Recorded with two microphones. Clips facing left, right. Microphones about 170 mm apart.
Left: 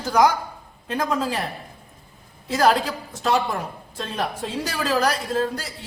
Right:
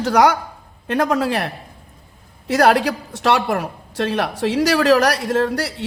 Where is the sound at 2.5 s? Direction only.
70° right (ahead or behind).